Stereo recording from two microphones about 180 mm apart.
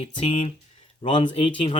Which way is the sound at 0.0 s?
35° left (ahead or behind).